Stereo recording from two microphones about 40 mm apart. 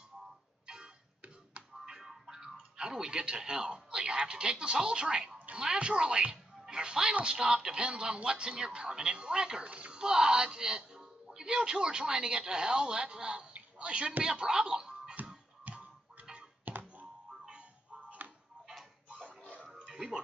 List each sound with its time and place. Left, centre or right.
2.0 s music: centre
2.8 s speech: centre
9.7 s speech: right
9.9 s speech: centre
13.5 s a sound: right
14.2 s speech: centre
15.7 s music: right
16.7 s music: right
17.5 s music: right
19.7 s music: centre